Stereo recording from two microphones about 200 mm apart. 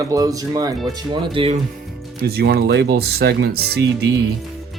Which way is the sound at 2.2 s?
55° right (ahead or behind).